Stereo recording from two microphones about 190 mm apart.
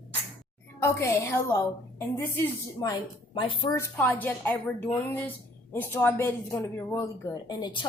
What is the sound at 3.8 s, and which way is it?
Speech, 10° left (ahead or behind).